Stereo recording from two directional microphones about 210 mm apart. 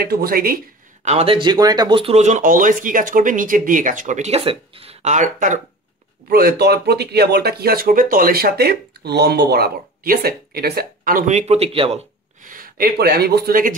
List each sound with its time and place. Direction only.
0.0 s speech: 45° right (ahead or behind)
1.0 s speech: 30° right (ahead or behind)
6.2 s speech: 50° right (ahead or behind)